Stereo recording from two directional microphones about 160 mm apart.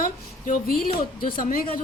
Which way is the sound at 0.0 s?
60° left (ahead or behind).